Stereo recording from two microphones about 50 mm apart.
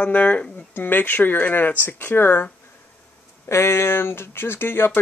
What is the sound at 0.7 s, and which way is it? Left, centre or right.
Speech, left.